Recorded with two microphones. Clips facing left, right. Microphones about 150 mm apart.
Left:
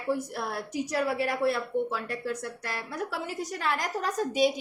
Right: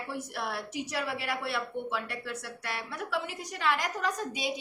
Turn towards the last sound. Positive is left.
turn(degrees=45)  # may be behind; listen again after turning